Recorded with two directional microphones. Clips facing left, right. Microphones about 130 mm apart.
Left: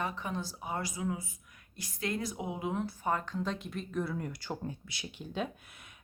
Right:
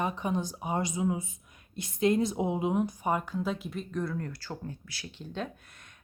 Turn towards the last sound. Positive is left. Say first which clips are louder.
# even
turn(degrees=5)  # may be behind; listen again after turning